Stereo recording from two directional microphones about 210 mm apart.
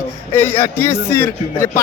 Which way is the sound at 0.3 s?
10° left (ahead or behind).